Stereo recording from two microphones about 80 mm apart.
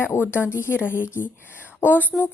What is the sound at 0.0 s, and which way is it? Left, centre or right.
A woman's voice, left.